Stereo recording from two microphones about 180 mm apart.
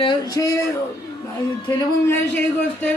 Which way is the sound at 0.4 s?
15° left (ahead or behind).